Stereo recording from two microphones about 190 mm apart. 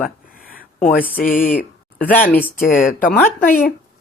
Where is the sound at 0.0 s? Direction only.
50° left (ahead or behind).